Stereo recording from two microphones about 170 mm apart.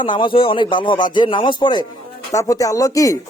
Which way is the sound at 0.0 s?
30° left (ahead or behind).